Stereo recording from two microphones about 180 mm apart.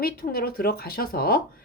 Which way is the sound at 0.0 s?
55° left (ahead or behind).